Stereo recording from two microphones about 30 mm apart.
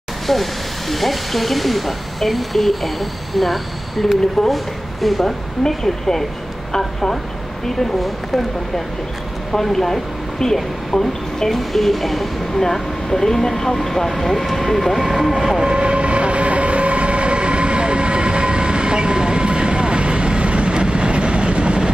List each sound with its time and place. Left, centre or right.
0.3 s speech: centre
5.6 s speech: centre
9.6 s speech: centre
12.7 s speech: centre
15.0 s speech: centre
15.6 s train: right